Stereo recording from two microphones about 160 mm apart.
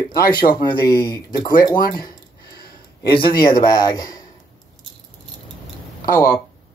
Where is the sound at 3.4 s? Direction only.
25° left (ahead or behind).